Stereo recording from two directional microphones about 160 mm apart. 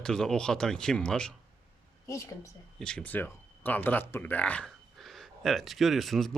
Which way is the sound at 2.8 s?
5° left (ahead or behind).